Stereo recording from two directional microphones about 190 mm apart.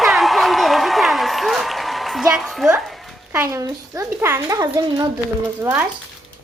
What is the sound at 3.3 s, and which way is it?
A child's voice, 15° right (ahead or behind).